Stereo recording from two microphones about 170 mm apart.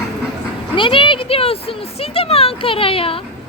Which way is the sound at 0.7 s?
30° left (ahead or behind).